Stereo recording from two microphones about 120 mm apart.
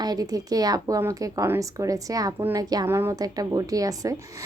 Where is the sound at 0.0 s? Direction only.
30° right (ahead or behind).